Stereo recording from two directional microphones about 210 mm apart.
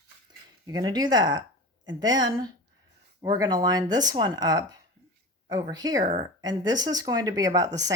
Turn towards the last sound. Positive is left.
turn(degrees=-15)  # may be behind; listen again after turning